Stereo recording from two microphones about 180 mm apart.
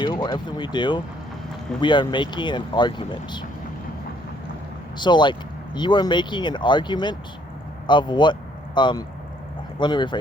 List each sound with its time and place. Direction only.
0.0 s speech: 25° left (ahead or behind)
4.9 s speech: 25° left (ahead or behind)